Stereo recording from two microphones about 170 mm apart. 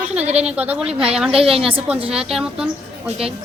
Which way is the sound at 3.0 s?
35° right (ahead or behind).